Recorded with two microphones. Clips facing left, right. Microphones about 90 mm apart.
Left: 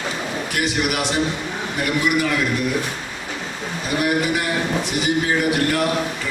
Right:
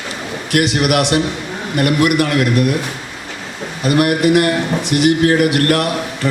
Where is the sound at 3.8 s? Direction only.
70° right (ahead or behind).